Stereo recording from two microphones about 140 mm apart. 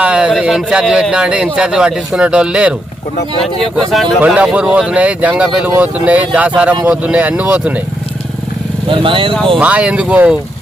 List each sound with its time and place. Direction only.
0.0 s speech: 5° right (ahead or behind)
8.9 s speech: 40° right (ahead or behind)
9.6 s speech: 10° right (ahead or behind)